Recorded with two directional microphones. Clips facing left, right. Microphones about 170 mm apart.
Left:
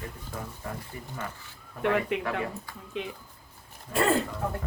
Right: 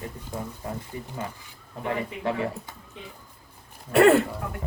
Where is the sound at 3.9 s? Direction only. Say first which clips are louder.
Right 8 dB; 65° right (ahead or behind).